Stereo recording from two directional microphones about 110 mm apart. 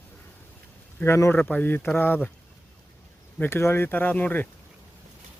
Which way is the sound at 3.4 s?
20° left (ahead or behind).